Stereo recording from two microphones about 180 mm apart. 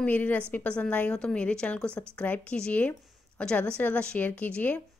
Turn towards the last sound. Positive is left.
turn(degrees=10)  # may be behind; listen again after turning